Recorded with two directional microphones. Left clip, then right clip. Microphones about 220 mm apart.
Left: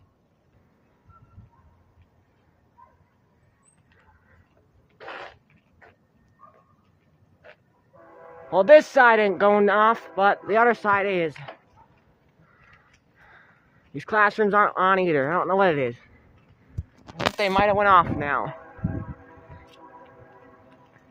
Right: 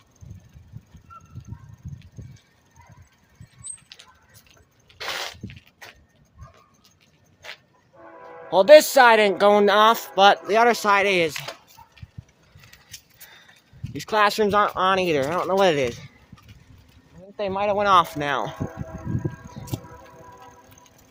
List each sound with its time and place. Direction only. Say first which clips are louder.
4.9 s a sound: right 8 dB; 25° right (ahead or behind)
8.4 s speech: right 3 dB; 15° right (ahead or behind)
10.4 s speech: right 2 dB; 15° right (ahead or behind)
13.2 s a sound: right 3 dB; 20° right (ahead or behind)
13.9 s speech: right 1 dB; 15° right (ahead or behind)
17.7 s speech: right 1 dB; 5° right (ahead or behind)
17.9 s speech: even; 20° right (ahead or behind)